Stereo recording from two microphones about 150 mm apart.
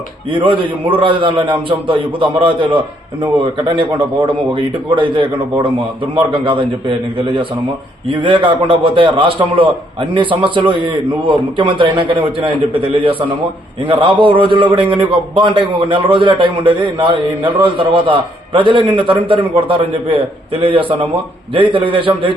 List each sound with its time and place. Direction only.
0.3 s a man's voice: 35° right (ahead or behind)
8.0 s a man's voice: 35° right (ahead or behind)